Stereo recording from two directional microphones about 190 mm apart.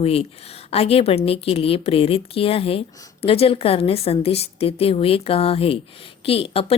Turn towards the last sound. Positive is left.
turn(degrees=30)  # may be behind; listen again after turning